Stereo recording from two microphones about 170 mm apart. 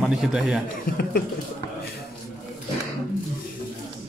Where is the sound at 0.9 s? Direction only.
60° left (ahead or behind).